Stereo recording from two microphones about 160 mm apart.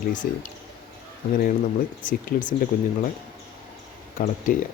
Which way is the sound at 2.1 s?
55° left (ahead or behind).